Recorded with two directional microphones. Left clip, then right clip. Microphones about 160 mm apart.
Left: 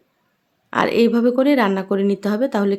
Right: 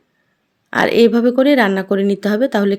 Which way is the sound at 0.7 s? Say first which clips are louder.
Right 4 dB; 20° right (ahead or behind).